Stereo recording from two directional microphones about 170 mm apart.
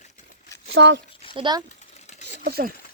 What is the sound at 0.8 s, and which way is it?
Speech, 90° right.